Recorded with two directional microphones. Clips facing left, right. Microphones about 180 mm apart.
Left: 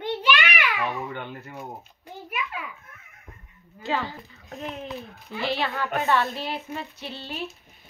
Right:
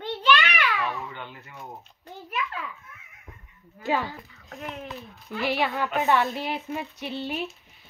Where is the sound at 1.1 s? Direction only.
55° left (ahead or behind).